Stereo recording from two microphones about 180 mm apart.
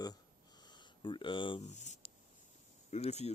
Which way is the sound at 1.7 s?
40° left (ahead or behind).